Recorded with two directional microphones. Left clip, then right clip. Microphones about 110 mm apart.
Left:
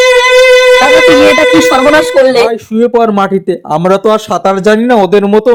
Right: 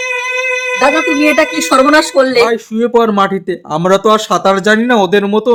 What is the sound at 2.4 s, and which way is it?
A child's voice, 30° left (ahead or behind).